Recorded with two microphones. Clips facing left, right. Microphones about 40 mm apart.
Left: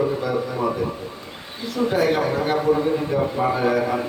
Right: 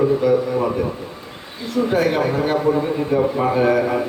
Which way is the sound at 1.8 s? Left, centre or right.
Right.